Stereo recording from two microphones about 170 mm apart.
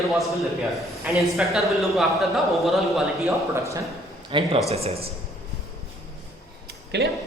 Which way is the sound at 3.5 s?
20° right (ahead or behind).